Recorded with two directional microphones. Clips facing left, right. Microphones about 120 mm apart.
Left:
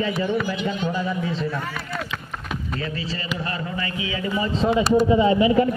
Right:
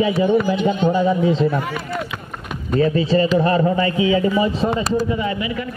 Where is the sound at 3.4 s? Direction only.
35° right (ahead or behind).